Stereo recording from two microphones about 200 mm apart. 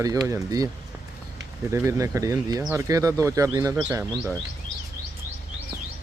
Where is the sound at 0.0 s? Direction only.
15° right (ahead or behind).